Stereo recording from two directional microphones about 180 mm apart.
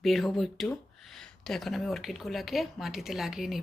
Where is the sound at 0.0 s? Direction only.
Centre (ahead or behind).